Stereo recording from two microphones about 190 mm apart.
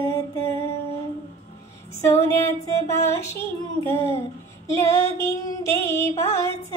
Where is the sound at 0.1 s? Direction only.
15° left (ahead or behind).